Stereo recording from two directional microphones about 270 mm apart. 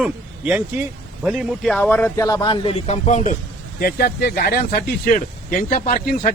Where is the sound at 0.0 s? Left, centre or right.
Centre.